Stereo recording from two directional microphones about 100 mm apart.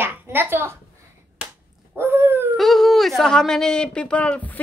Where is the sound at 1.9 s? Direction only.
20° right (ahead or behind).